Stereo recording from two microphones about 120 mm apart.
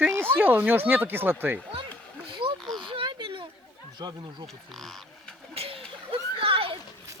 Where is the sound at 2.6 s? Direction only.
Centre (ahead or behind).